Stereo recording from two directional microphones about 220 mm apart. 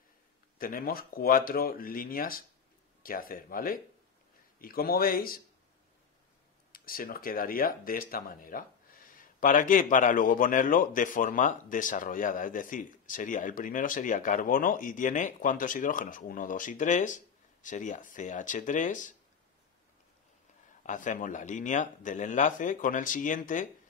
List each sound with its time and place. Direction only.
0.6 s speech: 40° left (ahead or behind)
6.7 s speech: 40° left (ahead or behind)
20.8 s speech: 35° left (ahead or behind)